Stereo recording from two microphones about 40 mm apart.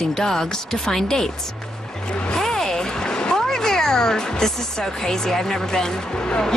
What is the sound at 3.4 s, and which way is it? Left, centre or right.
Speech, centre.